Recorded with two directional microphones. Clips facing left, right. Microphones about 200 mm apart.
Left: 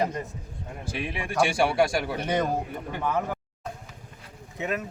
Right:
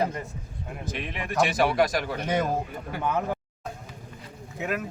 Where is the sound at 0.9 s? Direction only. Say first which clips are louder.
Left 1 dB; 5° left (ahead or behind).